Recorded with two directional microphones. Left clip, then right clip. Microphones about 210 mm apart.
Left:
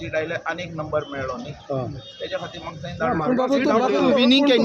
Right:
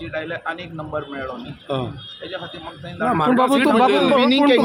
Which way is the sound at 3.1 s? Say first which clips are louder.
Right 5 dB; 45° right (ahead or behind).